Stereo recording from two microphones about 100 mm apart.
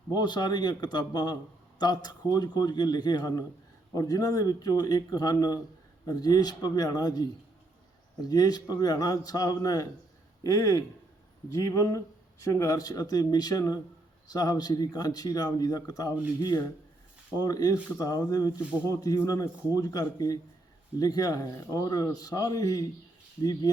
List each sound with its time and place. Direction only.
0.1 s a man's voice: 45° left (ahead or behind)
8.3 s speech: 40° left (ahead or behind)